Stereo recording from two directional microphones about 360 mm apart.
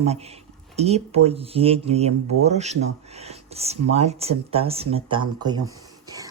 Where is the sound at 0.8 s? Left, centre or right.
Centre.